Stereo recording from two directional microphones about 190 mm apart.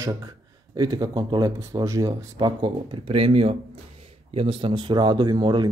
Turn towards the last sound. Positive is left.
turn(degrees=-20)  # may be behind; listen again after turning